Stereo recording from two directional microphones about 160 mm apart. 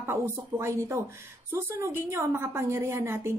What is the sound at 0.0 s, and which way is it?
A woman's voice, 15° right (ahead or behind).